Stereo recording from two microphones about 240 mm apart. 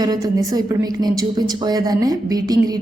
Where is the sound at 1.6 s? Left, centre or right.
Centre.